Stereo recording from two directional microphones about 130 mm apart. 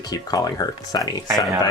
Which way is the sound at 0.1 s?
30° left (ahead or behind).